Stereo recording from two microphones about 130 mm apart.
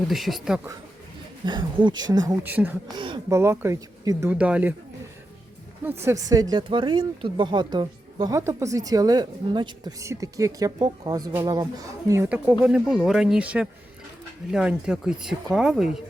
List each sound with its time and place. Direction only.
0.1 s speech: centre (ahead or behind)
1.5 s speech: 35° right (ahead or behind)
2.5 s speech: 15° right (ahead or behind)
2.9 s speech: 40° right (ahead or behind)
3.2 s a woman's voice: 20° right (ahead or behind)
4.3 s speech: 10° right (ahead or behind)
6.1 s a woman's voice: 30° right (ahead or behind)
6.6 s speech: 40° right (ahead or behind)
8.4 s a woman's voice: 20° right (ahead or behind)
10.0 s a woman's voice: 25° right (ahead or behind)
12.6 s speech: 5° right (ahead or behind)